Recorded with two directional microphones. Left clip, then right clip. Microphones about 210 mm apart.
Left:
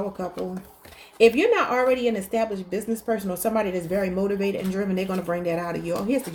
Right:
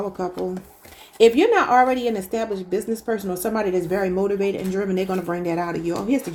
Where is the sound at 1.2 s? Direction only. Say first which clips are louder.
Right 3 dB; 30° right (ahead or behind).